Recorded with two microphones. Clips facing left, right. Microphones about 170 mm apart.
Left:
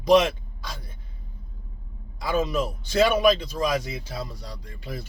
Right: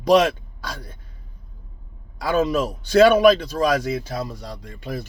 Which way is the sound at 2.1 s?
75° right (ahead or behind).